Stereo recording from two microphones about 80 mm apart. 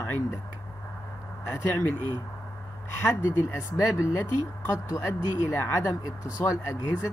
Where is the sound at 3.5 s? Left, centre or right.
Left.